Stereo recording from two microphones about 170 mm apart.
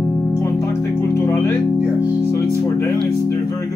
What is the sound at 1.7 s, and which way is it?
Music, 5° right (ahead or behind).